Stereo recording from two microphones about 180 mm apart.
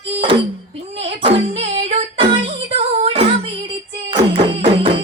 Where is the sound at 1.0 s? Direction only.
30° right (ahead or behind).